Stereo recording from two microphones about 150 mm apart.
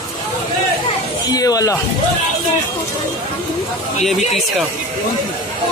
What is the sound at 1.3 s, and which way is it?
Speech, 25° left (ahead or behind).